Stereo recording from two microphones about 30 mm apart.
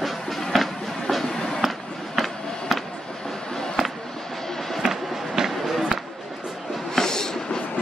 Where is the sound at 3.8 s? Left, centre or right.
Centre.